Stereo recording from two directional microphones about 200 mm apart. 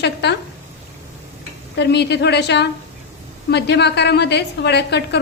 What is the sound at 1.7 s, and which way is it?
A woman's voice, 55° left (ahead or behind).